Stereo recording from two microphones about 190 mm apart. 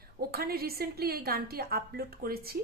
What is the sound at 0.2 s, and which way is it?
A woman's voice, 55° right (ahead or behind).